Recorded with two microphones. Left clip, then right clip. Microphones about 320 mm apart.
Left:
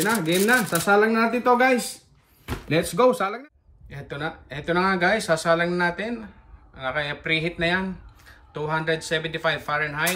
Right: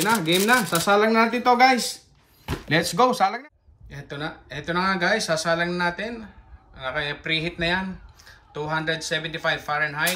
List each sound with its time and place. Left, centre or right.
0.0 s speech: centre
2.7 s speech: centre
3.9 s speech: centre